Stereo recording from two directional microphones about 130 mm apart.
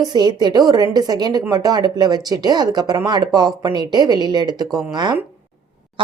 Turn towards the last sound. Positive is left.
turn(degrees=-35)  # may be behind; listen again after turning